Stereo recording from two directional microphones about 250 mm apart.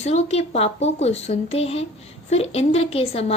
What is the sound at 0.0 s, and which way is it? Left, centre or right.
Female singing, left.